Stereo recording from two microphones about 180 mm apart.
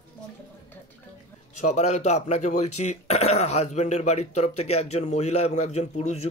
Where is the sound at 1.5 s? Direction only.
40° left (ahead or behind).